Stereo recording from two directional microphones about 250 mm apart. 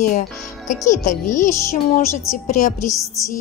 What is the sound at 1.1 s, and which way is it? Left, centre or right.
Speech, left.